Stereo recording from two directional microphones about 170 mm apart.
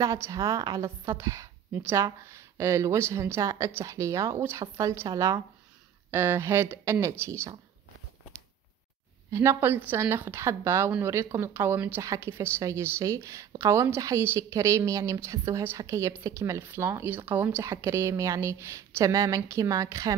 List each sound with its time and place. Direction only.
0.0 s a woman's voice: 20° right (ahead or behind)
9.3 s a woman's voice: 15° right (ahead or behind)